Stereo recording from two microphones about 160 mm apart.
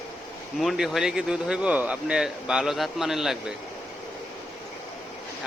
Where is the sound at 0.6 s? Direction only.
Centre (ahead or behind).